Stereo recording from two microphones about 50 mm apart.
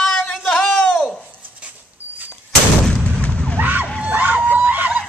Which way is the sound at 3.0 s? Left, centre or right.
Left.